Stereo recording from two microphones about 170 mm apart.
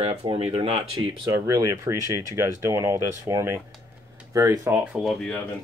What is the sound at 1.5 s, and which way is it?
Speech, 20° right (ahead or behind).